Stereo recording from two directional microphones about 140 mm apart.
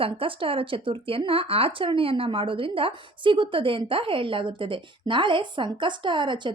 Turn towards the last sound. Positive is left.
turn(degrees=-35)  # may be behind; listen again after turning